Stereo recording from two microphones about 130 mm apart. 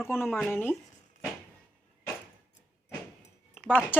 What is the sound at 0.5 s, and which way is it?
Speech, 15° left (ahead or behind).